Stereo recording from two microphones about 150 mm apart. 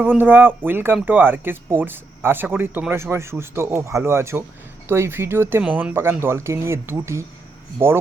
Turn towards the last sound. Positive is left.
turn(degrees=-15)  # may be behind; listen again after turning